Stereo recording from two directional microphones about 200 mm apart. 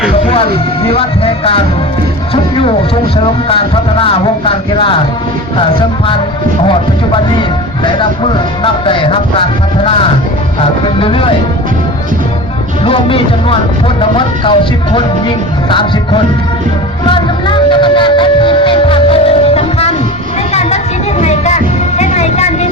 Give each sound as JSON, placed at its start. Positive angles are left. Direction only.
{"t": 0.9, "sound": "speech", "side_deg": 30}
{"t": 6.7, "sound": "speech", "side_deg": 25}
{"t": 10.6, "sound": "speech", "side_deg": 25}
{"t": 12.8, "sound": "speech", "side_deg": 25}
{"t": 17.1, "sound": "music", "side_deg": 25}
{"t": 20.5, "sound": "a sound", "side_deg": 35}
{"t": 21.2, "sound": "music", "side_deg": 35}